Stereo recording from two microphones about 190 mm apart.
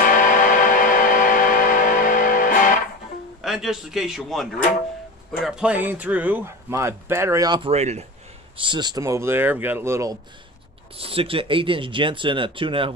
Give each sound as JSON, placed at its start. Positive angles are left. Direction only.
{"t": 0.0, "sound": "music", "side_deg": 45}
{"t": 3.4, "sound": "a man's voice", "side_deg": 0}
{"t": 8.5, "sound": "speech", "side_deg": -25}
{"t": 11.0, "sound": "speech", "side_deg": -30}